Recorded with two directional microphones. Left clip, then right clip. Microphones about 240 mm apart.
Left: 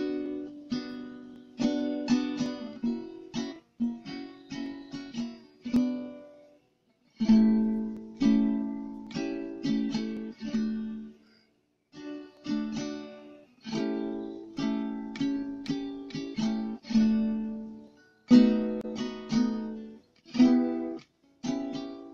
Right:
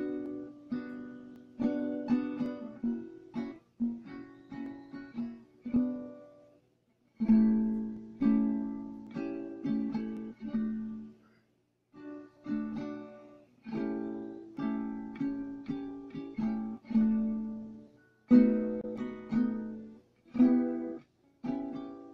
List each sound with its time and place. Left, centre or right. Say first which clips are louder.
0.0 s music: left 4 dB; left
7.2 s music: left 3 dB; left
11.9 s music: left 5 dB; left